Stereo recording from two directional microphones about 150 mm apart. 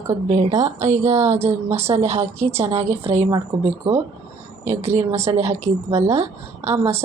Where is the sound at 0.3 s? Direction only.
45° right (ahead or behind).